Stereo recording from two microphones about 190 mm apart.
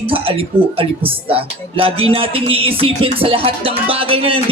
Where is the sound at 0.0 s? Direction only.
30° right (ahead or behind).